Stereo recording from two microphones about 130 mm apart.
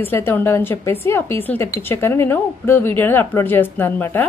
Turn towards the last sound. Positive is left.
turn(degrees=15)  # may be behind; listen again after turning